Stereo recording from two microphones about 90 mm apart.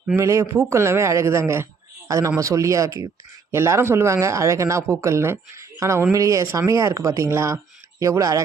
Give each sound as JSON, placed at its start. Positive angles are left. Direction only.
{"t": 0.2, "sound": "speech", "side_deg": -35}